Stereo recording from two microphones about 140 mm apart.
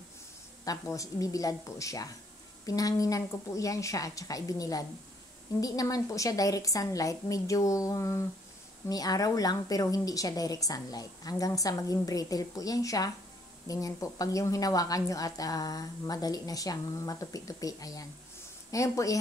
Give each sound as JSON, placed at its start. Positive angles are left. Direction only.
{"t": 0.7, "sound": "a woman's voice", "side_deg": 25}